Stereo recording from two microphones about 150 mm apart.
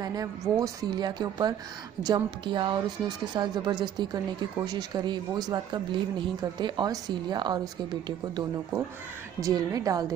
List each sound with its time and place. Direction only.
0.0 s a woman's voice: 25° right (ahead or behind)